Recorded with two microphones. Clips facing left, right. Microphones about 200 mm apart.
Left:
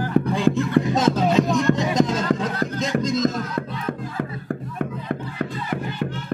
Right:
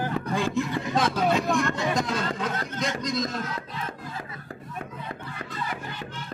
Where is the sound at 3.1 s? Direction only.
45° left (ahead or behind).